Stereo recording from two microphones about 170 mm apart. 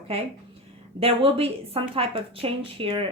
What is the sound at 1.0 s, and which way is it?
A woman's voice, 35° right (ahead or behind).